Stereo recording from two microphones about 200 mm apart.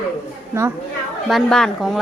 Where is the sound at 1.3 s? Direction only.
Centre (ahead or behind).